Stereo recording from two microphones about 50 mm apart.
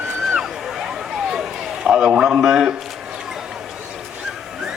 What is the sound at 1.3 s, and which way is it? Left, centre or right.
Run, centre.